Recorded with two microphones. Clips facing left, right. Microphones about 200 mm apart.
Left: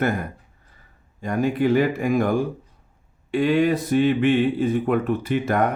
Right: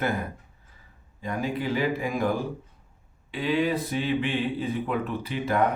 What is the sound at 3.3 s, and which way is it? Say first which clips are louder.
Speech: left 6 dB; 50° left (ahead or behind).